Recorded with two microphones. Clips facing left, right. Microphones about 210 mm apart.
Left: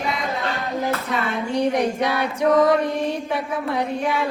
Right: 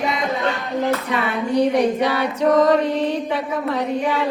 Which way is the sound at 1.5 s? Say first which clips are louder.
Right 4 dB; 10° left (ahead or behind).